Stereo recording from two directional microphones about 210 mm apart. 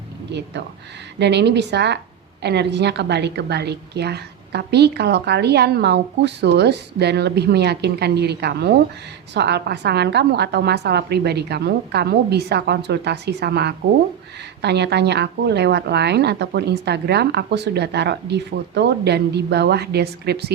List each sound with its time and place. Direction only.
0.3 s a woman's voice: 55° right (ahead or behind)